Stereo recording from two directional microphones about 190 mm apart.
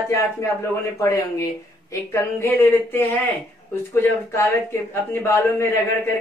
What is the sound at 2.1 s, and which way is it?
Speech, 10° left (ahead or behind).